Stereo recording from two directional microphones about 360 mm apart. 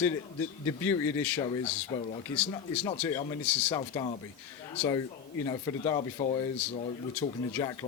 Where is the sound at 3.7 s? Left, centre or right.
Centre.